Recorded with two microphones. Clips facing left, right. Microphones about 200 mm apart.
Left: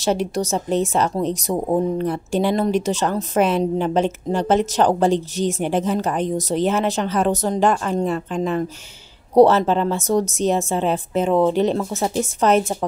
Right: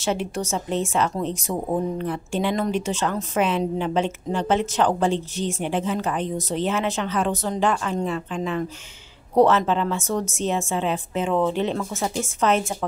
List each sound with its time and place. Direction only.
0.0 s speech: 40° left (ahead or behind)